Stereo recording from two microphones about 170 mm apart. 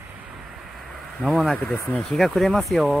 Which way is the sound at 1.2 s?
Centre (ahead or behind).